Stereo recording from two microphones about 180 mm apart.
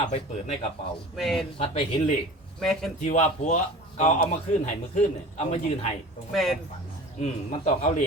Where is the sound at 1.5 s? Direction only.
30° left (ahead or behind).